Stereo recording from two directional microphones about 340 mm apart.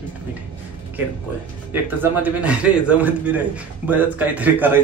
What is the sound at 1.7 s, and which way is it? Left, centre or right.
A man's voice, centre.